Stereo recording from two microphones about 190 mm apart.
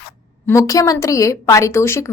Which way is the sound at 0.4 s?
15° left (ahead or behind).